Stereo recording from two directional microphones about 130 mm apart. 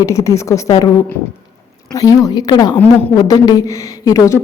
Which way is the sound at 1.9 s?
25° left (ahead or behind).